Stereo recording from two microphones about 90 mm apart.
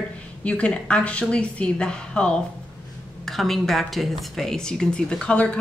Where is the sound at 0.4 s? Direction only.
15° left (ahead or behind).